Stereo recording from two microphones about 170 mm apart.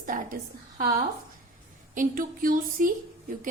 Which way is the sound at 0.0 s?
50° right (ahead or behind).